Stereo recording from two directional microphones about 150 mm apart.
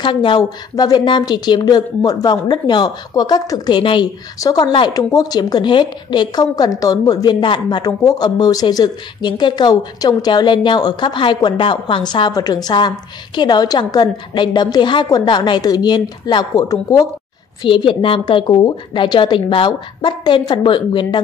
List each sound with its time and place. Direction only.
0.0 s a woman's voice: 35° left (ahead or behind)